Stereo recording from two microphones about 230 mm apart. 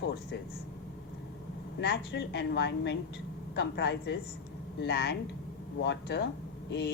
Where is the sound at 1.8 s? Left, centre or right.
Left.